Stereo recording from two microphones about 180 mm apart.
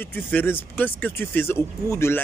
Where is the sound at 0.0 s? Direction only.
10° left (ahead or behind).